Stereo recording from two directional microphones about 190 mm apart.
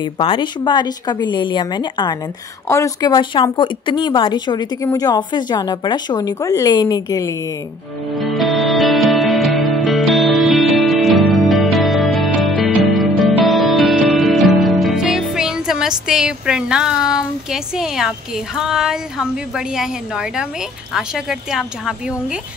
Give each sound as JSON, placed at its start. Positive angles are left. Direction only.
{"t": 0.0, "sound": "speech", "side_deg": 25}
{"t": 8.2, "sound": "music", "side_deg": 0}
{"t": 16.1, "sound": "speech", "side_deg": -5}